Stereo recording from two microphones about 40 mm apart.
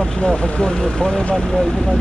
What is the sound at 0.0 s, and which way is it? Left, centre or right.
Vehicle, centre.